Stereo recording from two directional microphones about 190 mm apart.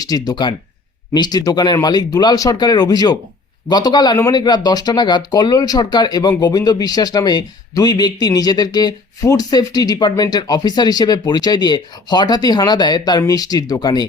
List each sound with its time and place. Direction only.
0.0 s speech: 20° left (ahead or behind)